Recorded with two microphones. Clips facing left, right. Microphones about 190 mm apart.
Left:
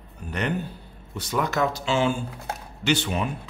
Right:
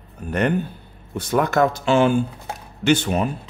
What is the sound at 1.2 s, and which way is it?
Speech, 55° right (ahead or behind).